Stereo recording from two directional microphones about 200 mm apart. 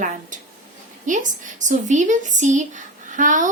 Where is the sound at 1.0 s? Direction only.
40° right (ahead or behind).